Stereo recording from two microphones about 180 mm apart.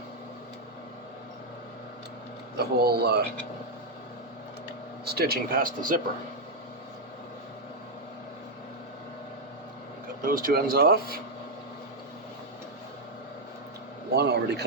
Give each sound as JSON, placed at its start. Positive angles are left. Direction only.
{"t": 2.6, "sound": "speech", "side_deg": -60}
{"t": 5.0, "sound": "speech", "side_deg": -60}
{"t": 10.2, "sound": "speech", "side_deg": -55}
{"t": 14.2, "sound": "a man's voice", "side_deg": -65}